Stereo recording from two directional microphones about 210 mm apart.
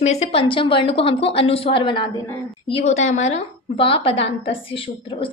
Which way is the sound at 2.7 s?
30° left (ahead or behind).